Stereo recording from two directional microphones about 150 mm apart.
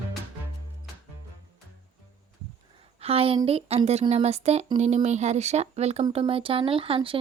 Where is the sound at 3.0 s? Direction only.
40° right (ahead or behind).